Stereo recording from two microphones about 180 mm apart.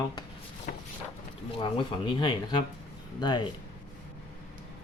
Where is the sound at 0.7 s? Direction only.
45° left (ahead or behind).